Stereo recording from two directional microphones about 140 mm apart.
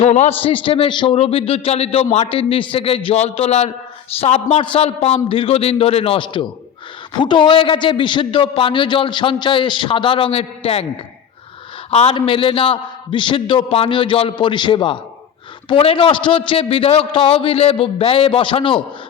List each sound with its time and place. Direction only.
0.0 s a man's voice: 55° left (ahead or behind)
11.9 s a man's voice: 50° left (ahead or behind)